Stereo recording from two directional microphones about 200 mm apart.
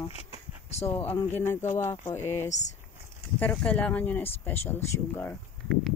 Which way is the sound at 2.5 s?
35° left (ahead or behind).